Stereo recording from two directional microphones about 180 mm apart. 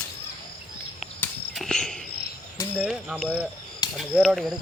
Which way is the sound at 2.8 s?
5° right (ahead or behind).